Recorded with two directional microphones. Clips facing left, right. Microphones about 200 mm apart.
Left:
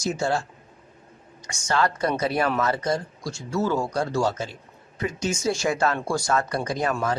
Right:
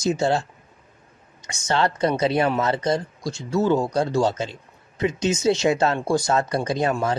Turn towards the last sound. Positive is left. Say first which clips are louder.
# right 3 dB
turn(degrees=-25)  # may be behind; listen again after turning